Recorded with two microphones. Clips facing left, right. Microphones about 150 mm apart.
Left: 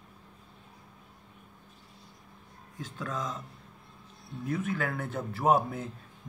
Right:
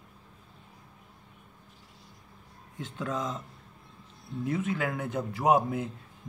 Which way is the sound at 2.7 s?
20° right (ahead or behind).